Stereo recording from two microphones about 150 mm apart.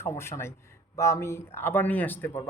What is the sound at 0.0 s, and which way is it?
A man's voice, 15° left (ahead or behind).